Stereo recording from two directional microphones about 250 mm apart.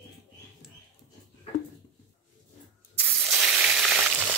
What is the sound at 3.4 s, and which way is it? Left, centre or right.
Frying, centre.